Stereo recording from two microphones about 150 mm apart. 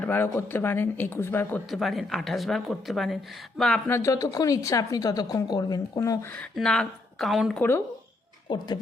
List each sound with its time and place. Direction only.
0.0 s speech: 15° left (ahead or behind)
1.7 s speech: centre (ahead or behind)
3.8 s a woman's voice: 20° left (ahead or behind)
6.6 s speech: 5° left (ahead or behind)
8.4 s a woman's voice: 30° left (ahead or behind)